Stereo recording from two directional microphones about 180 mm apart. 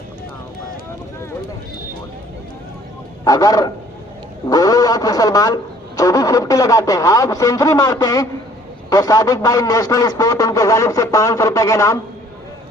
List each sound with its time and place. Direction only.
3.2 s a man's voice: 20° left (ahead or behind)